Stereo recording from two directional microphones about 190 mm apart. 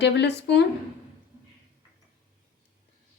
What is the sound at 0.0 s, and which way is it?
Speech, 65° left (ahead or behind).